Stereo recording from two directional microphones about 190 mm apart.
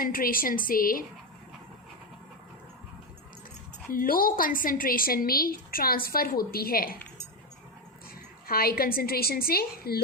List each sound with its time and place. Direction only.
0.0 s a woman's voice: 50° left (ahead or behind)
3.9 s a woman's voice: 50° left (ahead or behind)
8.4 s a woman's voice: 50° left (ahead or behind)